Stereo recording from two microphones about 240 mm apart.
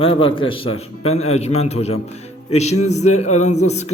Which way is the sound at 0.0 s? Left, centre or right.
Left.